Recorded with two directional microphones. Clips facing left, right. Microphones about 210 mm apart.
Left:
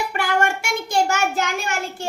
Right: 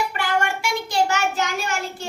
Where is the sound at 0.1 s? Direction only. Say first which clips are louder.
Left 2 dB; 45° left (ahead or behind).